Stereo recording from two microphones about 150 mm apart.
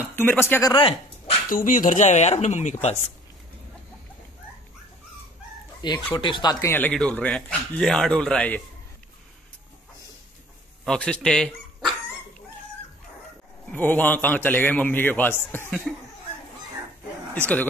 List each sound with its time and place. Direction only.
0.1 s a man's voice: 15° left (ahead or behind)
0.7 s dog: 40° left (ahead or behind)
1.5 s speech: 65° left (ahead or behind)
5.8 s speech: 30° left (ahead or behind)
6.7 s a man's voice: 10° left (ahead or behind)
10.9 s speech: 5° left (ahead or behind)
13.7 s a man's voice: 10° left (ahead or behind)